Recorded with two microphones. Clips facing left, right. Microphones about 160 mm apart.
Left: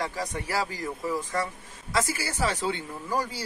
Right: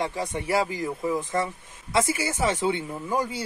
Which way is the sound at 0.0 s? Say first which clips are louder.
Right 3 dB; 25° right (ahead or behind).